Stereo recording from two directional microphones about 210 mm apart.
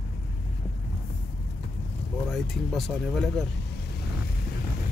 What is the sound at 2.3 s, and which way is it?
Speech, centre (ahead or behind).